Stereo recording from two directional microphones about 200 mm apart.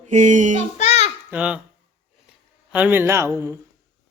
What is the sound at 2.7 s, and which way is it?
Speech, 5° right (ahead or behind).